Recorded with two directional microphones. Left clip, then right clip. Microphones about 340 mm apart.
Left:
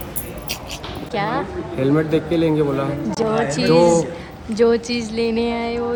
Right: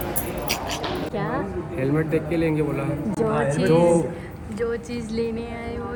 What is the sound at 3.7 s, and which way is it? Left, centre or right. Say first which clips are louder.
Speech: left 5 dB; centre.